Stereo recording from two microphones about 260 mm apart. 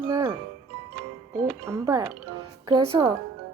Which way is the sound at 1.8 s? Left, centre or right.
Centre.